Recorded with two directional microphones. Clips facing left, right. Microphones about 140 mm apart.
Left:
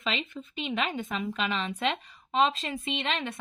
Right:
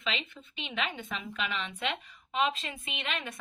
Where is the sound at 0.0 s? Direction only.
40° left (ahead or behind).